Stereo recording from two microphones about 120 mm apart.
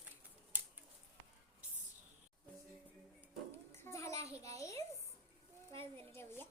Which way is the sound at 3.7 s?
20° left (ahead or behind).